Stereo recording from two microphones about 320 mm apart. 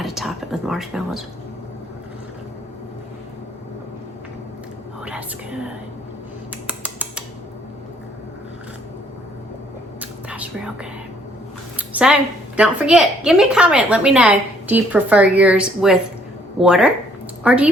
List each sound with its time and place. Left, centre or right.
0.0 s speech: centre
5.0 s speech: centre
6.7 s a sound: centre
10.0 s whispering: centre
11.8 s a woman's voice: centre